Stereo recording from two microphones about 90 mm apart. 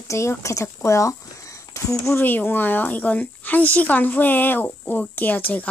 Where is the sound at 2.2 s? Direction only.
20° left (ahead or behind).